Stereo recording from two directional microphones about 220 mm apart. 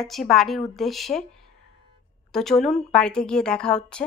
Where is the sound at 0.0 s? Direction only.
Centre (ahead or behind).